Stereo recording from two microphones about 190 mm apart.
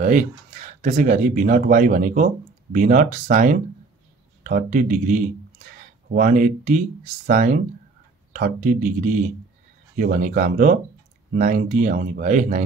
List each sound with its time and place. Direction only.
0.0 s speech: 45° right (ahead or behind)